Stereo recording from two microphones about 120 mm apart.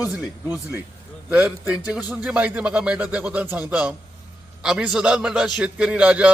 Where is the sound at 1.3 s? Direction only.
10° right (ahead or behind).